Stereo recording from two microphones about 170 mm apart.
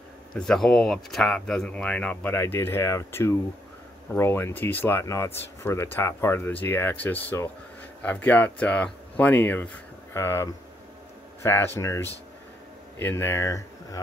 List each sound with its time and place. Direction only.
0.3 s speech: 5° left (ahead or behind)